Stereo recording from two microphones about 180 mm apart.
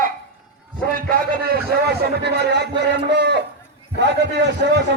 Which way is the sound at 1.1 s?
60° right (ahead or behind).